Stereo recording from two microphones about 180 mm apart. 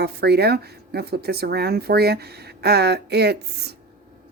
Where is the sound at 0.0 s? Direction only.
65° right (ahead or behind).